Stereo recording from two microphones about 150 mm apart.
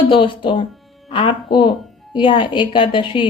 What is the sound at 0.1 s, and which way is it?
A woman's voice, 35° left (ahead or behind).